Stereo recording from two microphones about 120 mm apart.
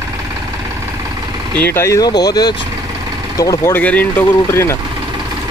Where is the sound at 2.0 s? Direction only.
35° left (ahead or behind).